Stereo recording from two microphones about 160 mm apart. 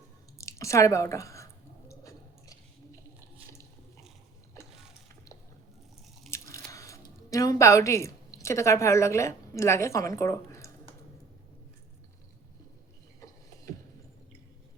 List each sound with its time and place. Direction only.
0.3 s drip: 20° left (ahead or behind)
1.9 s a sound: 20° left (ahead or behind)
6.3 s speech: 20° left (ahead or behind)